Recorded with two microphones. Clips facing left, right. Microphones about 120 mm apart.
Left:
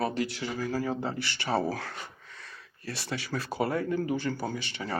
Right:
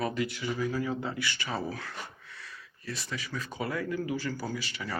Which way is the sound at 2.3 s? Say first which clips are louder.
Even; 60° left (ahead or behind).